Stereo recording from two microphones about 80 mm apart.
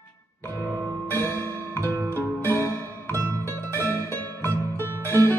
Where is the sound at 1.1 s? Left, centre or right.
Left.